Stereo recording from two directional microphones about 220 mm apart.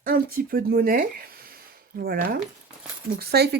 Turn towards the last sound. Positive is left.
turn(degrees=-45)  # may be behind; listen again after turning